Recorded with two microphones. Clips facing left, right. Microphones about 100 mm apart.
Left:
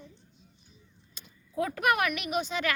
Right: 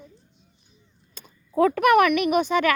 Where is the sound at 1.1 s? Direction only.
55° right (ahead or behind).